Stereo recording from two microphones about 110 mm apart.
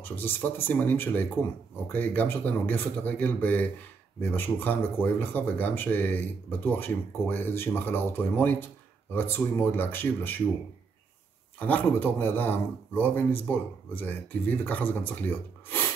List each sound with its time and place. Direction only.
0.0 s speech: 20° left (ahead or behind)
11.6 s speech: 15° left (ahead or behind)